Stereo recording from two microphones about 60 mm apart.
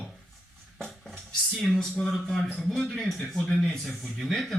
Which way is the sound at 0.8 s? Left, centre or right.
Centre.